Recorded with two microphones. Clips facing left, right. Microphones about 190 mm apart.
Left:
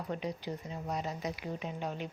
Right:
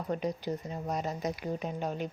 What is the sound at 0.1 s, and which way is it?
Speech, 45° right (ahead or behind).